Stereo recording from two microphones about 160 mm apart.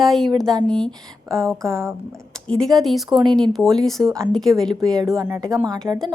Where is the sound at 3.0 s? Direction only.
30° right (ahead or behind).